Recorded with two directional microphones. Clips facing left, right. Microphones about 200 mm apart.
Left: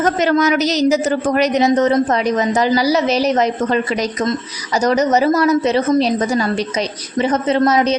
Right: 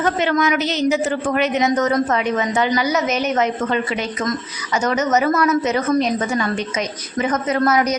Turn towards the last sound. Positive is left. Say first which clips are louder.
# left 3 dB
turn(degrees=25)  # may be behind; listen again after turning